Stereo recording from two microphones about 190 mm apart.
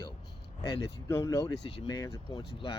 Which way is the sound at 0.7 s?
15° left (ahead or behind).